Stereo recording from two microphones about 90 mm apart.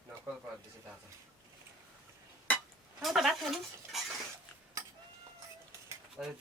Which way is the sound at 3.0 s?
Centre (ahead or behind).